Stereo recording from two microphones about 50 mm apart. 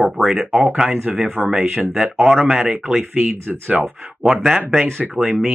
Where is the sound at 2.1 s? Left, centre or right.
Centre.